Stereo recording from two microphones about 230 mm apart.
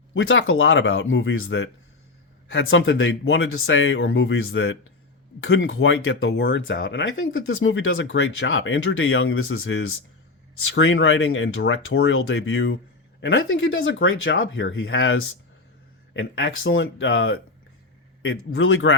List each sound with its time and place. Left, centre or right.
0.1 s speech: left